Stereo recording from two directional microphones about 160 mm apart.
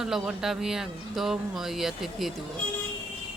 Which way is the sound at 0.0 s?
5° right (ahead or behind).